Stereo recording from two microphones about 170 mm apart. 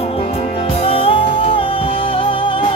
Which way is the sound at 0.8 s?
35° left (ahead or behind).